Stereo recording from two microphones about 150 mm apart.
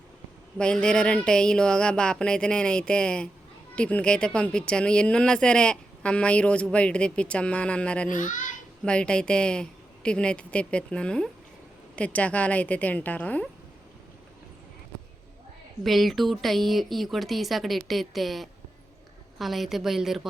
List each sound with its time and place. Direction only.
0.6 s speech: 5° left (ahead or behind)
8.1 s a child's voice: 60° left (ahead or behind)
8.8 s speech: 5° left (ahead or behind)
15.8 s speech: centre (ahead or behind)